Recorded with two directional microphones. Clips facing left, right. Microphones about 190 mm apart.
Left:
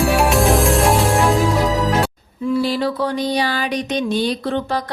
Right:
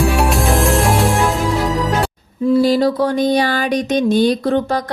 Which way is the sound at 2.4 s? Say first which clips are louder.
Right 6 dB; 40° right (ahead or behind).